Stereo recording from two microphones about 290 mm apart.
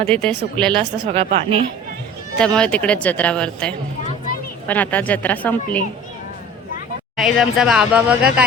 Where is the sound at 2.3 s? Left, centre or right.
Centre.